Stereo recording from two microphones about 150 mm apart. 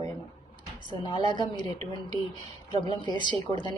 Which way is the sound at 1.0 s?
30° left (ahead or behind).